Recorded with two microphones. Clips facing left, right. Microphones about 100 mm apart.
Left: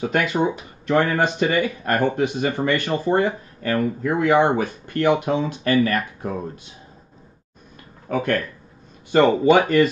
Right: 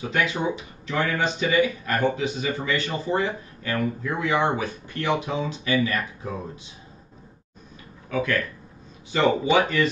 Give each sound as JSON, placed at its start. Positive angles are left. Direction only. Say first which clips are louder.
{"t": 0.0, "sound": "speech", "louder": "left 4 dB", "side_deg": 50}
{"t": 8.1, "sound": "speech", "louder": "left 3 dB", "side_deg": 50}